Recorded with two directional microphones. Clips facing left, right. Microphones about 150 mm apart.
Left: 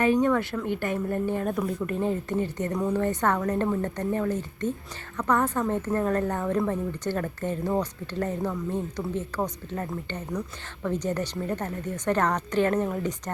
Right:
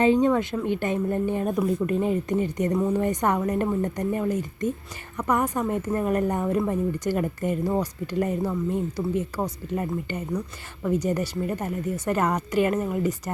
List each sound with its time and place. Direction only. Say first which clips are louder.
0.0 s a woman's voice: right 2 dB; 20° right (ahead or behind)